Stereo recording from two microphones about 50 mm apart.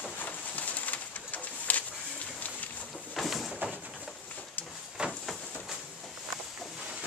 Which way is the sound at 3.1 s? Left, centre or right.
Centre.